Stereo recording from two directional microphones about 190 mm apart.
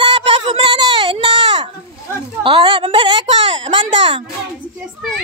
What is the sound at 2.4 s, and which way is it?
A woman's voice, 25° right (ahead or behind).